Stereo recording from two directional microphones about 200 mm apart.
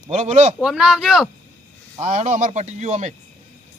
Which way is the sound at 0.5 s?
5° right (ahead or behind).